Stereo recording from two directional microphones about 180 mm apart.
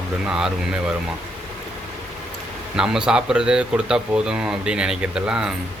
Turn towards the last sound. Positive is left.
turn(degrees=-5)  # may be behind; listen again after turning